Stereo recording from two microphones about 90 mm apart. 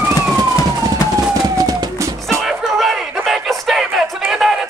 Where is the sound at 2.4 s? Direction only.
Centre (ahead or behind).